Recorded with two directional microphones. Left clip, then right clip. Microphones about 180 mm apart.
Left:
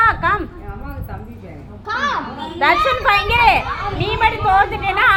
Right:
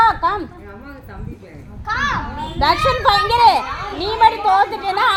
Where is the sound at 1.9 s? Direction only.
70° right (ahead or behind).